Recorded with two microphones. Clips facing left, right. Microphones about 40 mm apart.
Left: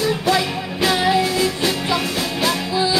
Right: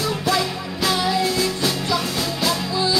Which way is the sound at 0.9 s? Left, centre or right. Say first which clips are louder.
Left 3 dB; left.